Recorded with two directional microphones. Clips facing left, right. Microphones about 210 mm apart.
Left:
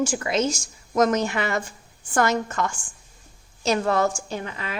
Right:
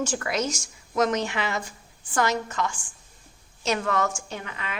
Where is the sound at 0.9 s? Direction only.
45° left (ahead or behind).